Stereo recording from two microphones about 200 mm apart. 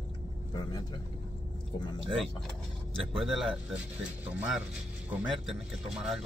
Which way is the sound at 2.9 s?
Centre (ahead or behind).